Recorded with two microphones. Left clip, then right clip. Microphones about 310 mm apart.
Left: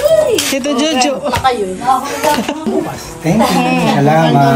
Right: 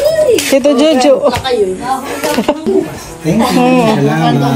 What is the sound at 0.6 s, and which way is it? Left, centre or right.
Speech, centre.